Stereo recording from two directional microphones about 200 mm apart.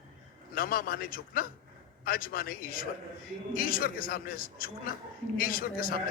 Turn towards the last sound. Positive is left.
turn(degrees=45)  # may be behind; listen again after turning